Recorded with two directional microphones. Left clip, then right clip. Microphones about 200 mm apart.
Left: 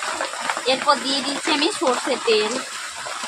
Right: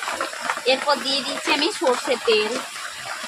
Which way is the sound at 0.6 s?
15° left (ahead or behind).